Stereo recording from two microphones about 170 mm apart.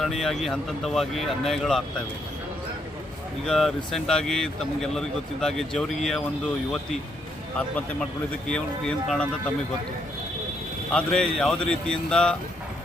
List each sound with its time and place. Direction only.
0.0 s speech: centre (ahead or behind)
3.4 s speech: centre (ahead or behind)
8.4 s speech: 5° left (ahead or behind)
10.9 s speech: 5° left (ahead or behind)